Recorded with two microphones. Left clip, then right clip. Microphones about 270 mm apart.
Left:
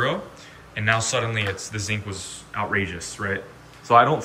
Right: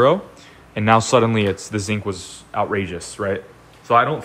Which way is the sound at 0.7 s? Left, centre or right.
Centre.